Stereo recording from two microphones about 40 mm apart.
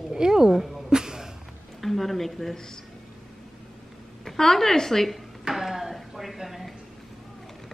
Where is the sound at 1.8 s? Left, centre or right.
Centre.